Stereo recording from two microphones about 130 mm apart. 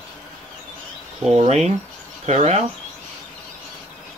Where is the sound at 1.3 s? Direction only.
55° right (ahead or behind).